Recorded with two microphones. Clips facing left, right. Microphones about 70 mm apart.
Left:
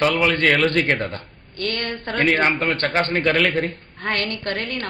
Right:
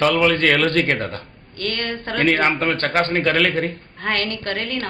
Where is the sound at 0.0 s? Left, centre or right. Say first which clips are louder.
Right 2 dB; centre.